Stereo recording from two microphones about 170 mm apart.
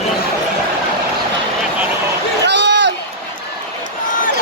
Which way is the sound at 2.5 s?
90° right.